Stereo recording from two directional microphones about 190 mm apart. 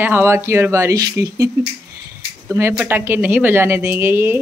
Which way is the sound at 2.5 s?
15° right (ahead or behind).